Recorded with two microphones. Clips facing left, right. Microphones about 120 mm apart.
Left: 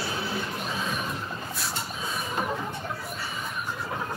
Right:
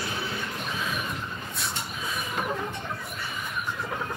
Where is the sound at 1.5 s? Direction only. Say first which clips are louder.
Left 1 dB; centre (ahead or behind).